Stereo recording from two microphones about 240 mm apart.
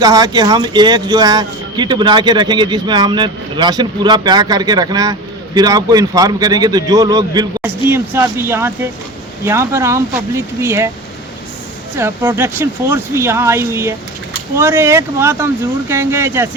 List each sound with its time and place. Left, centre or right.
0.0 s speech: centre
11.9 s speech: centre